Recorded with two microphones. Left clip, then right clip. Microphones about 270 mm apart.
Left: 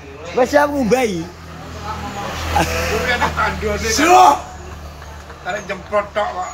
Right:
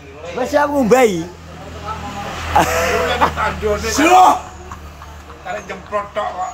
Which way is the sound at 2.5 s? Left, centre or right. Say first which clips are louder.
Right 4 dB; centre.